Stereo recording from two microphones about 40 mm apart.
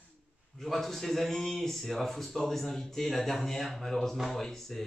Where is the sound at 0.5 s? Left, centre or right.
Centre.